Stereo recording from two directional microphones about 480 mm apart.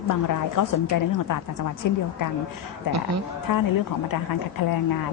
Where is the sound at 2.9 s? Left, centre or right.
Right.